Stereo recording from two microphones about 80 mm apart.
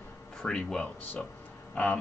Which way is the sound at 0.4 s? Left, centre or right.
Centre.